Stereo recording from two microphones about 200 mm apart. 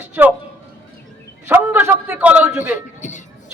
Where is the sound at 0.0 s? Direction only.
10° right (ahead or behind).